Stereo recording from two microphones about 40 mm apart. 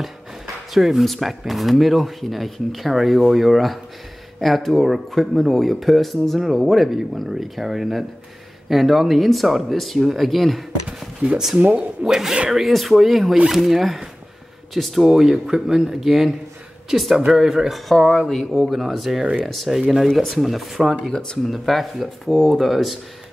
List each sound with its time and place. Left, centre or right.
0.7 s speech: centre
10.9 s a sound: right
11.5 s speech: right
12.0 s speech: centre
19.7 s speech: centre
20.1 s speech: centre
20.3 s speech: centre
21.1 s speech: centre
21.5 s speech: centre